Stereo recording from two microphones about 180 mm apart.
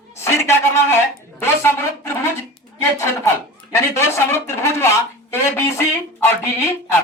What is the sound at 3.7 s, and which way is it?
Speech, 15° left (ahead or behind).